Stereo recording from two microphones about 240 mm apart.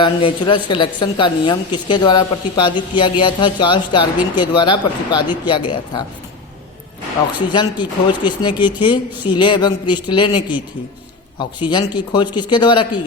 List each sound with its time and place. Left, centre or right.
0.0 s speech: left
7.5 s speech: centre
11.7 s speech: centre